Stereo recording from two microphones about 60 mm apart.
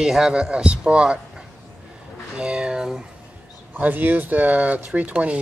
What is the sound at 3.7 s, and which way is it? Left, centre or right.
Speech, right.